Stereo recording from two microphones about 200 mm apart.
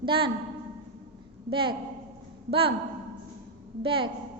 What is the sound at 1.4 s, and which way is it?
A woman's voice, 25° right (ahead or behind).